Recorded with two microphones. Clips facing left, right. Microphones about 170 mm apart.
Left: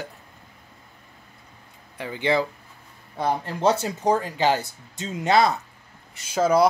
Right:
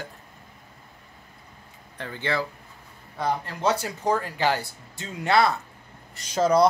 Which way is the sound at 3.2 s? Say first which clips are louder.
Left 3 dB; 25° left (ahead or behind).